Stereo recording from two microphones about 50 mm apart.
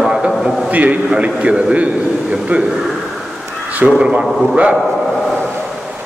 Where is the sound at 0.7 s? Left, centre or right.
Right.